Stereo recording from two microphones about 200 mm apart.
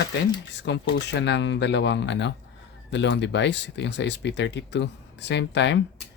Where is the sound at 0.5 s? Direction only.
60° left (ahead or behind).